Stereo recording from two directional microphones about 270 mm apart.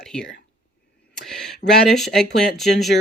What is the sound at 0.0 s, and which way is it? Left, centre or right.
Whispering, centre.